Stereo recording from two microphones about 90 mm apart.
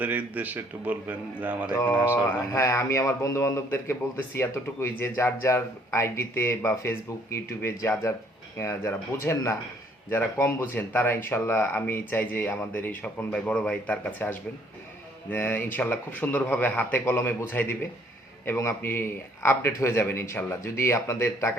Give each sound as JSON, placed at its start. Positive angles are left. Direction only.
{"t": 0.0, "sound": "a man's voice", "side_deg": -20}
{"t": 2.5, "sound": "a man's voice", "side_deg": 35}
{"t": 15.3, "sound": "speech", "side_deg": 20}